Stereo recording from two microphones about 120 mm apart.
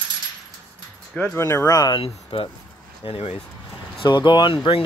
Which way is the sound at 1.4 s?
25° left (ahead or behind).